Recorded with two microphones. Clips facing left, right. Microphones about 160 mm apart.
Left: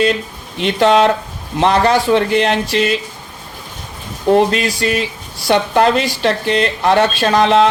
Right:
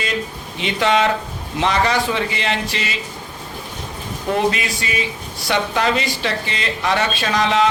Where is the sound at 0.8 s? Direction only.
50° left (ahead or behind).